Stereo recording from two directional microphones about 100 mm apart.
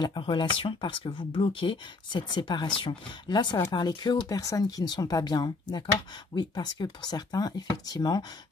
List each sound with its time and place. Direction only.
0.0 s speech: 50° left (ahead or behind)